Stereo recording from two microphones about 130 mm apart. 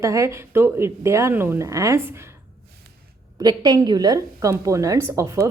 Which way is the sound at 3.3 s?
30° right (ahead or behind).